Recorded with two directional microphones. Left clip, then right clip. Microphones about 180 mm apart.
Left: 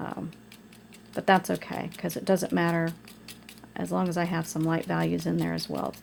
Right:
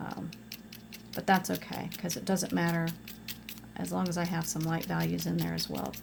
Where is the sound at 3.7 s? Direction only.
40° left (ahead or behind).